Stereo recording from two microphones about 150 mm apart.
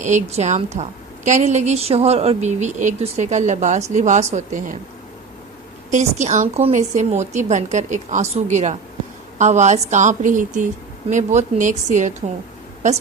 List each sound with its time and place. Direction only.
0.0 s a woman's voice: 50° right (ahead or behind)
5.9 s a woman's voice: 50° right (ahead or behind)